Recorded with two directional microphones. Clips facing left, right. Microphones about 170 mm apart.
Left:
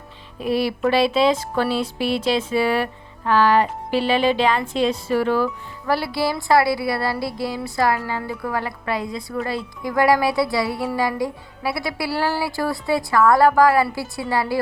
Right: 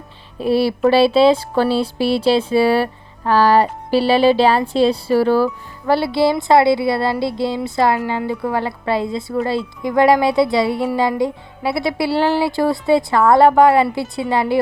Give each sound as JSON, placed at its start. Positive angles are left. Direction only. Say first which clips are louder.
{"t": 0.3, "sound": "speech", "louder": "right 5 dB", "side_deg": -30}